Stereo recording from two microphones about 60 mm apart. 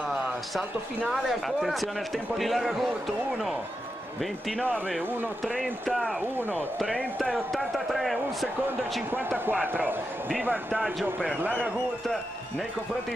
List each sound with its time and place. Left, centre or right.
1.1 s a man's voice: centre
4.2 s a man's voice: centre
7.5 s a man's voice: centre
9.5 s speech: right